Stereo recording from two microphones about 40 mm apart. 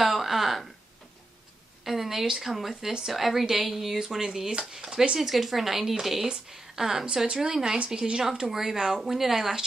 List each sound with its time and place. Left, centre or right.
0.0 s a sound: centre
1.9 s a woman's voice: centre
2.7 s speech: centre
3.1 s a woman's voice: centre
4.2 s speech: centre
5.2 s a woman's voice: centre
6.2 s speech: centre
8.5 s speech: centre